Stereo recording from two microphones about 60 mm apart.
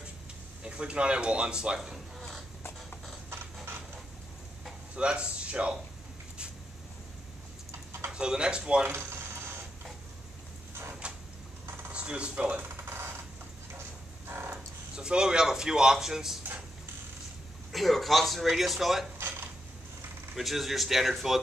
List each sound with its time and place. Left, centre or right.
0.7 s speech: centre
4.9 s speech: centre
8.1 s speech: centre
8.9 s a sound: right
10.7 s a sound: right
11.9 s speech: centre
12.6 s a sound: right
14.5 s speech: centre
17.7 s speech: centre
20.3 s speech: centre